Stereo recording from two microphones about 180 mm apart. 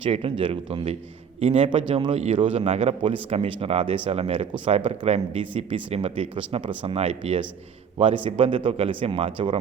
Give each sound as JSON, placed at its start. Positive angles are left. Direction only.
{"t": 0.0, "sound": "a man's voice", "side_deg": -30}